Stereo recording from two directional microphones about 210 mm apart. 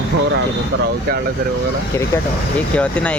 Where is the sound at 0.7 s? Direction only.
50° right (ahead or behind).